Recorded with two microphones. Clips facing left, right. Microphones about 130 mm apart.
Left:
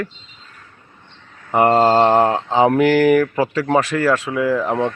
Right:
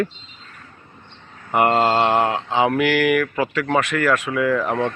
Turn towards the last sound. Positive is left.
turn(degrees=25)  # may be behind; listen again after turning